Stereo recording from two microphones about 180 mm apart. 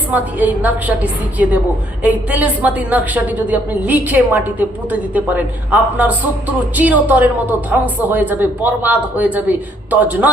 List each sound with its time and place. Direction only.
0.1 s speech: 10° right (ahead or behind)